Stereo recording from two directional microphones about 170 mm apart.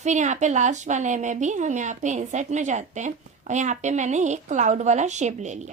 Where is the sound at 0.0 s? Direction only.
45° right (ahead or behind).